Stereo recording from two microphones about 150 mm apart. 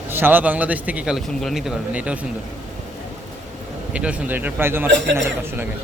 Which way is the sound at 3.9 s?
10° right (ahead or behind).